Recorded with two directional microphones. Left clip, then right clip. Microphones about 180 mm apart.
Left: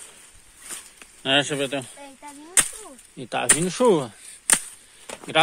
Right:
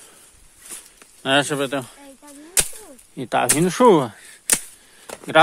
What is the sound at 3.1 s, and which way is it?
Speech, 45° right (ahead or behind).